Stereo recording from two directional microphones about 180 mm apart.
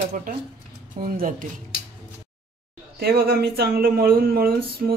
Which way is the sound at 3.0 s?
60° right (ahead or behind).